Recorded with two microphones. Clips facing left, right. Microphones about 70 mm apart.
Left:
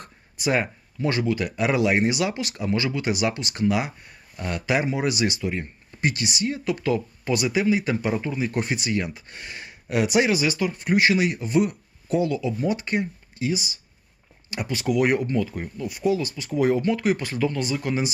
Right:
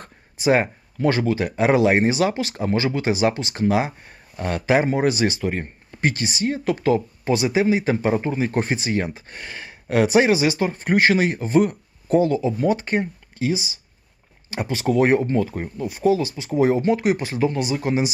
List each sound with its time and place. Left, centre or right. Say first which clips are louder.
0.3 s speech: right 5 dB; right
5.4 s speech: right 3 dB; right
13.5 s speech: right 3 dB; right